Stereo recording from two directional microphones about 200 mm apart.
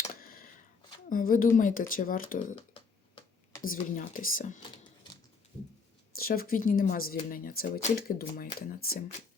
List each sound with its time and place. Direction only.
0.2 s a sound: 45° left (ahead or behind)
1.1 s speech: 45° left (ahead or behind)
2.6 s typing: 25° left (ahead or behind)
3.7 s speech: 45° left (ahead or behind)
6.1 s speech: 45° left (ahead or behind)